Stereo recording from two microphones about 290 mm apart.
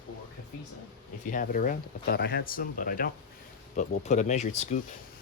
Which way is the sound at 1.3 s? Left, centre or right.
Left.